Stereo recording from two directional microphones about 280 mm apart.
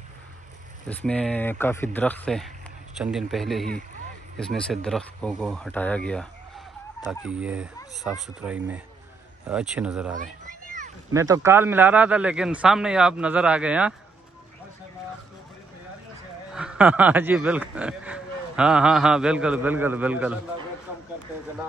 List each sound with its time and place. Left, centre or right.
0.8 s speech: centre
11.1 s speech: centre
16.5 s speech: centre